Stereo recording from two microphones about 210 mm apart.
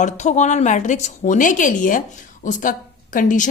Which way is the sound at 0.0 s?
35° left (ahead or behind).